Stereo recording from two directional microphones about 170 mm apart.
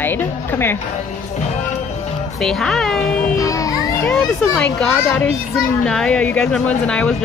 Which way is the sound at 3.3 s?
20° left (ahead or behind).